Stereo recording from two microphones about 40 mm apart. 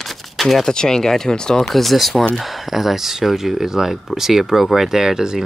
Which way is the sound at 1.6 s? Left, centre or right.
Centre.